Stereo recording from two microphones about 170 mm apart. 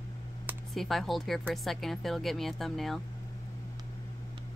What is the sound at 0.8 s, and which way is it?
Speech, centre (ahead or behind).